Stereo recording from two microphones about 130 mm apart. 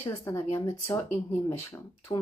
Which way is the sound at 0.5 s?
20° left (ahead or behind).